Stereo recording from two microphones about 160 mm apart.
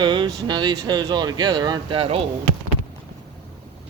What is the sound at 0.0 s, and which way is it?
Speech, 30° right (ahead or behind).